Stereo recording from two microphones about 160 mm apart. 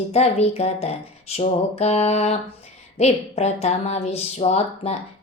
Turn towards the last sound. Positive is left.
turn(degrees=40)  # may be behind; listen again after turning